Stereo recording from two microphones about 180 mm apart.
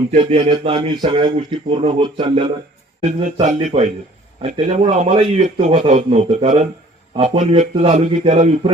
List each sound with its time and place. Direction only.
0.1 s speech: 35° right (ahead or behind)
3.4 s a man's voice: 40° right (ahead or behind)